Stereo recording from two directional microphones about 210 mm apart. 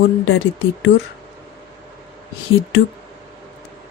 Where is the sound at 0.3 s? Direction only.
65° left (ahead or behind).